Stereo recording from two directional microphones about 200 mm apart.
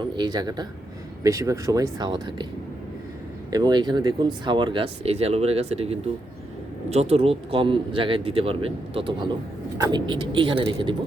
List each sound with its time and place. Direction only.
0.0 s speech: 20° right (ahead or behind)
3.5 s speech: 20° right (ahead or behind)